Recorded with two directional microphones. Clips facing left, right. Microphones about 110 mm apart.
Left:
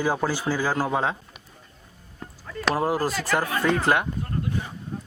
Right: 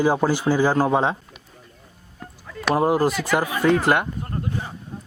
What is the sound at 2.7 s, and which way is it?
A man's voice, 20° right (ahead or behind).